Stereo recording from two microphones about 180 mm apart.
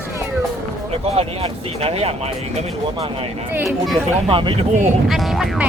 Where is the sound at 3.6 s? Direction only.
Centre (ahead or behind).